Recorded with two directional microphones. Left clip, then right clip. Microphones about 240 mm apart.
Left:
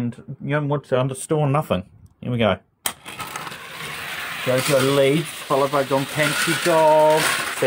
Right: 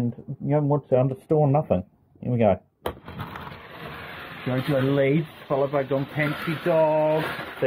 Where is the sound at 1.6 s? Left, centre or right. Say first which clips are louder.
Left 1 dB; left.